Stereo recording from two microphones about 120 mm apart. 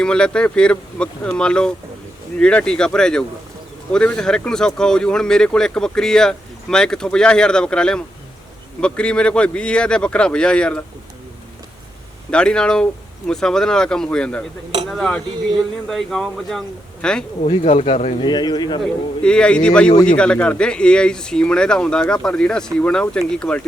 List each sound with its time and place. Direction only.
0.0 s speech: 5° left (ahead or behind)
12.3 s speech: 10° left (ahead or behind)
17.4 s speech: 75° left (ahead or behind)
18.2 s speech: 35° left (ahead or behind)
18.8 s speech: 10° left (ahead or behind)